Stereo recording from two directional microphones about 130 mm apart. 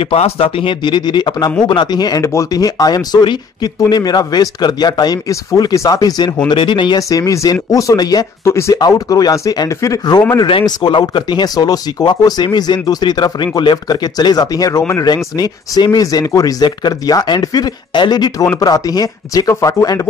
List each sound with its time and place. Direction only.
0.0 s speech: 50° left (ahead or behind)
7.0 s speech: 25° left (ahead or behind)